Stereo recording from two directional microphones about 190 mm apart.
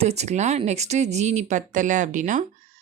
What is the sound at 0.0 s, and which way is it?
Speech, 35° right (ahead or behind).